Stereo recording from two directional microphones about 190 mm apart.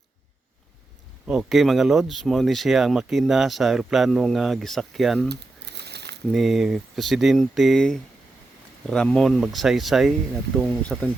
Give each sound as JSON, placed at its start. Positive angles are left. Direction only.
{"t": 1.3, "sound": "speech", "side_deg": 0}
{"t": 5.3, "sound": "crumpling", "side_deg": -60}
{"t": 6.3, "sound": "speech", "side_deg": 0}